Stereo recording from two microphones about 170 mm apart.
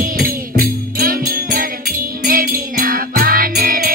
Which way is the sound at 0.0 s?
60° right (ahead or behind).